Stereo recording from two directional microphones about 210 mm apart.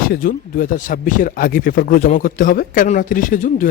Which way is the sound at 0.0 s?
45° left (ahead or behind).